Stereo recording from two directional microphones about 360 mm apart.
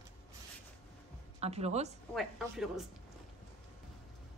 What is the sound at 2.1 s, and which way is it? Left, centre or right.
Speech, centre.